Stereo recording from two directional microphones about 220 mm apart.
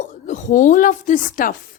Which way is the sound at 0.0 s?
35° left (ahead or behind).